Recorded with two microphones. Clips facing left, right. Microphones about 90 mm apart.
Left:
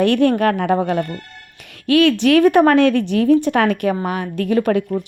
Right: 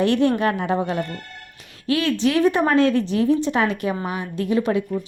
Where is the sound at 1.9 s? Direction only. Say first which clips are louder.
Left 7 dB; 70° left (ahead or behind).